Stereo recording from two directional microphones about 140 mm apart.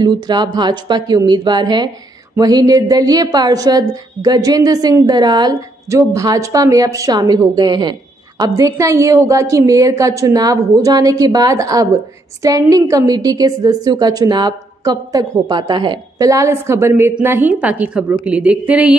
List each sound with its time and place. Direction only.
0.0 s a woman's voice: 30° right (ahead or behind); by 18.9 s 5° right (ahead or behind)